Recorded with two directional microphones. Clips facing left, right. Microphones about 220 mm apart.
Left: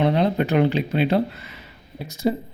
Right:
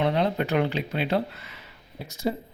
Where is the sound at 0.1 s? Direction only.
20° left (ahead or behind).